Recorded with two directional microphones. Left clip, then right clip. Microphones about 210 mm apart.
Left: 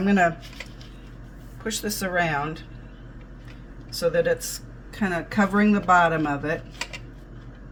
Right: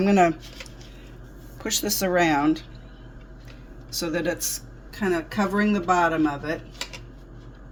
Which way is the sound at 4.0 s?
25° right (ahead or behind).